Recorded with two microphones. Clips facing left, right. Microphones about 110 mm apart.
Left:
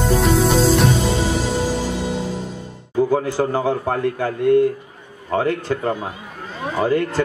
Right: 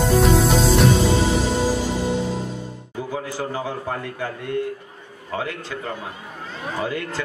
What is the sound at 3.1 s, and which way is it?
A man's voice, 55° left (ahead or behind).